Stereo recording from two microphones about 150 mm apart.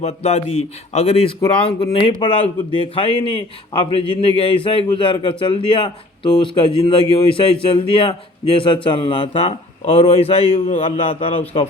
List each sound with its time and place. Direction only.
0.0 s a man's voice: 45° left (ahead or behind)
1.4 s a man's voice: 30° left (ahead or behind)